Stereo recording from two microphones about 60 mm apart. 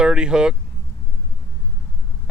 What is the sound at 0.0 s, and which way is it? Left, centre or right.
Speech, centre.